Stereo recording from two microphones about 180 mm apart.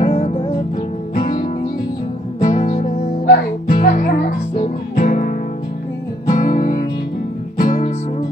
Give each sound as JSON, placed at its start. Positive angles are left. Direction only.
{"t": 0.0, "sound": "music", "side_deg": 35}
{"t": 1.1, "sound": "music", "side_deg": 55}
{"t": 2.4, "sound": "music", "side_deg": 40}
{"t": 6.3, "sound": "music", "side_deg": 50}